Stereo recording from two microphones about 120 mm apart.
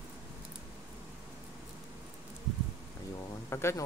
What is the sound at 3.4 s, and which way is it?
Speech, 20° left (ahead or behind).